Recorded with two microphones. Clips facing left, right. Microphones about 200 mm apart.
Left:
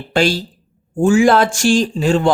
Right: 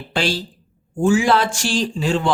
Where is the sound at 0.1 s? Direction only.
45° left (ahead or behind).